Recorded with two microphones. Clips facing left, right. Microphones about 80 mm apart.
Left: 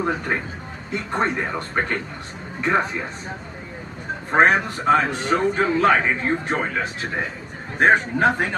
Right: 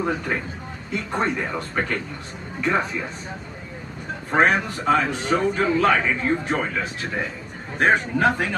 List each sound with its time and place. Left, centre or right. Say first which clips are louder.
0.0 s a man's voice: left 1 dB; centre
2.6 s a man's voice: left 2 dB; centre
4.3 s a man's voice: left 2 dB; centre